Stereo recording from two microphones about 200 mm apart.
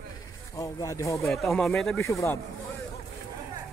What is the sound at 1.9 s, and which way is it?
Speech, 15° left (ahead or behind).